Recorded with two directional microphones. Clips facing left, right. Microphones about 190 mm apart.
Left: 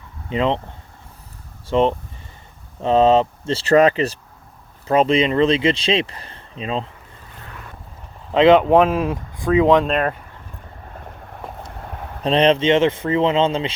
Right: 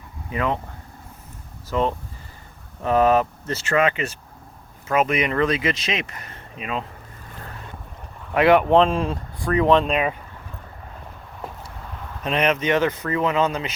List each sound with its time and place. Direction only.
0.3 s speech: 25° left (ahead or behind)
1.6 s speech: 25° left (ahead or behind)
8.3 s speech: 20° left (ahead or behind)
8.7 s speech: 10° left (ahead or behind)
9.8 s speech: 5° right (ahead or behind)
12.2 s speech: 30° left (ahead or behind)